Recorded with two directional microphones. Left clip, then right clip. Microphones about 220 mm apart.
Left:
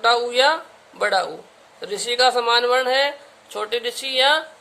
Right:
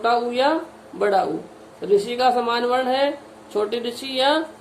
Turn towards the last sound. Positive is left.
turn(degrees=25)  # may be behind; listen again after turning